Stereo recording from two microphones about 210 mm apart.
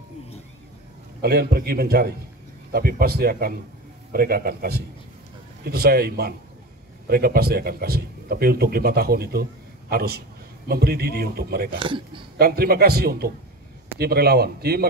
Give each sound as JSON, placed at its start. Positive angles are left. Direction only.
{"t": 1.2, "sound": "a man's voice", "side_deg": -50}